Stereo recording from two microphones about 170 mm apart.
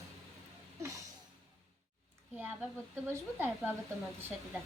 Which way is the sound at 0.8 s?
20° right (ahead or behind).